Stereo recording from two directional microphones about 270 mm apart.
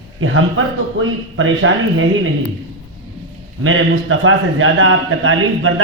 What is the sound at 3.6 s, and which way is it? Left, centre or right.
A man's voice, right.